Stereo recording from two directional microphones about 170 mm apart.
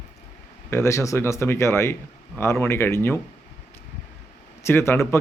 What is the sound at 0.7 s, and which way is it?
Speech, 15° left (ahead or behind).